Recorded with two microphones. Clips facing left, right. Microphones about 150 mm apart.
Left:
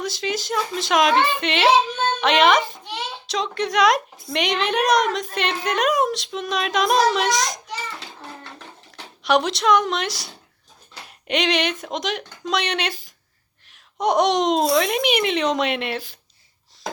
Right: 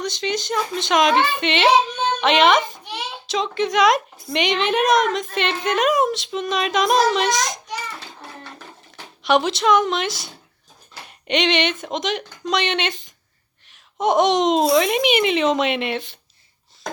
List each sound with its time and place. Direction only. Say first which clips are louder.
0.0 s a woman's voice: right 1 dB; centre (ahead or behind)
8.5 s bathtub: even; 5° right (ahead or behind)
11.3 s a woman's voice: right 2 dB; centre (ahead or behind)